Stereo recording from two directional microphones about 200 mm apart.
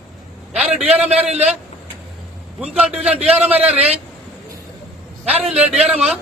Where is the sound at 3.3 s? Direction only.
10° right (ahead or behind).